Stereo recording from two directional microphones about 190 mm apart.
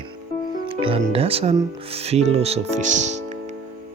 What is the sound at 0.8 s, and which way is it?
Speech, 30° right (ahead or behind).